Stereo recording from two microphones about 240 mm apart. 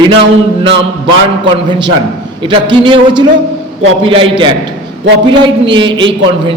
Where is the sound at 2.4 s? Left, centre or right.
Right.